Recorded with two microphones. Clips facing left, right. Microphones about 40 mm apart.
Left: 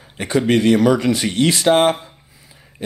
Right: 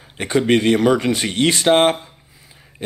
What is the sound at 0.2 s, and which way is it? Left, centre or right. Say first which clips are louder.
Speech: even; right.